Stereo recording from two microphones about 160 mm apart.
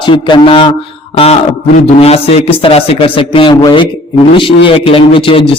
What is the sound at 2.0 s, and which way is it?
A man's voice, 40° left (ahead or behind).